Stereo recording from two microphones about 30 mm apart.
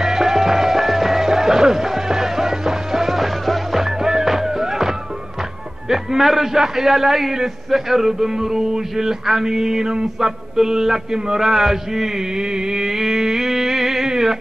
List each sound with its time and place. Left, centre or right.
0.0 s music: centre
5.9 s a man's voice: centre
9.2 s a man's voice: centre
9.5 s music: centre
11.4 s a man's voice: centre
12.4 s a sound: right